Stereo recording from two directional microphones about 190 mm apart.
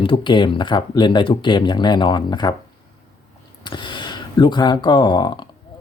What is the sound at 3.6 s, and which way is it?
Speech, 25° left (ahead or behind).